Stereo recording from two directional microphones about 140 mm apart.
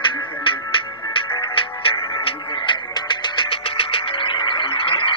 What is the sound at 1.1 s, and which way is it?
Music, 40° left (ahead or behind).